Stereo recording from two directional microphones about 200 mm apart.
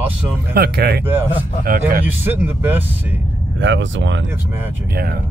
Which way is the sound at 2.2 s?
10° right (ahead or behind).